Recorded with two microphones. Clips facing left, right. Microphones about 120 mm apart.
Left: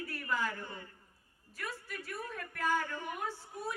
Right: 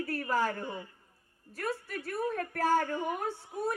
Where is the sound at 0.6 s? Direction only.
15° right (ahead or behind).